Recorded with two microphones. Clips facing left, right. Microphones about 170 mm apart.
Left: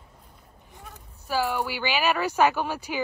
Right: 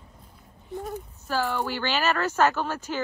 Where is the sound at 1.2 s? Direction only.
10° left (ahead or behind).